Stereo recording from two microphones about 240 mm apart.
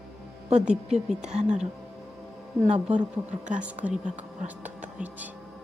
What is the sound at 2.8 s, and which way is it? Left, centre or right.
Speech, centre.